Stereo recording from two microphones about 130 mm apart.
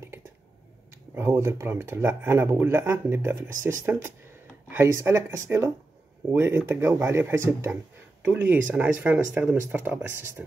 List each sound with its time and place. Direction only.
1.1 s speech: 20° right (ahead or behind)